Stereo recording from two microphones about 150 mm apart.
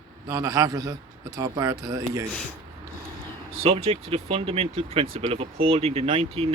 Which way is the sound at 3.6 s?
40° right (ahead or behind).